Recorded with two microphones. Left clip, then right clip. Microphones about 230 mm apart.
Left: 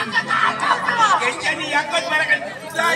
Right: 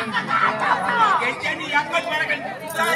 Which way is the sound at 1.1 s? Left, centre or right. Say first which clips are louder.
Left 2 dB; left.